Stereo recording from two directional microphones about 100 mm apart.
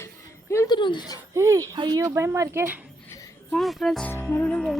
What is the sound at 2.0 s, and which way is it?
Speech, 30° right (ahead or behind).